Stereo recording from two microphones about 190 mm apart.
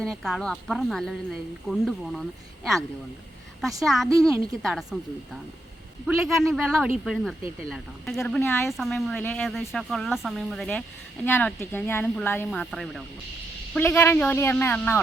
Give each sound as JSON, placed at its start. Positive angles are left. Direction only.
{"t": 0.0, "sound": "speech", "side_deg": 0}
{"t": 3.6, "sound": "speech", "side_deg": 0}
{"t": 4.1, "sound": "a woman's voice", "side_deg": -15}
{"t": 4.6, "sound": "speech", "side_deg": 0}
{"t": 6.5, "sound": "speech", "side_deg": 0}
{"t": 8.4, "sound": "speech", "side_deg": 15}
{"t": 8.7, "sound": "speech", "side_deg": 0}